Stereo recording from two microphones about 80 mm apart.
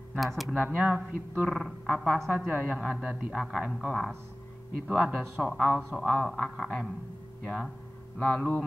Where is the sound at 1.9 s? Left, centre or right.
Centre.